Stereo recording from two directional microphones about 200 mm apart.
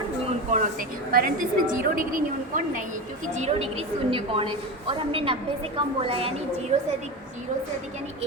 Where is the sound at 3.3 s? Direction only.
35° right (ahead or behind).